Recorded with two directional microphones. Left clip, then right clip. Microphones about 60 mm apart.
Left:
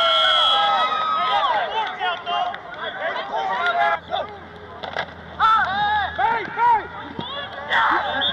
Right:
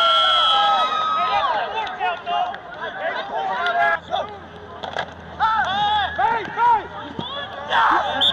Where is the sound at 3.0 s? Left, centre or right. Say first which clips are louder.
Even; left.